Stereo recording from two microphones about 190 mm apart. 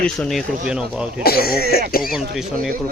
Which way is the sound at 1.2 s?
55° left (ahead or behind).